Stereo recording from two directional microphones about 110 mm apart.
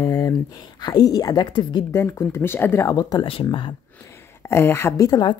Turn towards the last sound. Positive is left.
turn(degrees=40)  # may be behind; listen again after turning